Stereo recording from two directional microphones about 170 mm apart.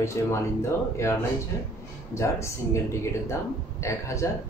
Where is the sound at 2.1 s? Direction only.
15° left (ahead or behind).